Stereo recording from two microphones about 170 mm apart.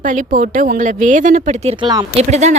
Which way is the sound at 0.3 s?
50° right (ahead or behind).